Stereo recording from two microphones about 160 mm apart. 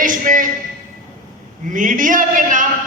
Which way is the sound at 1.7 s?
55° right (ahead or behind).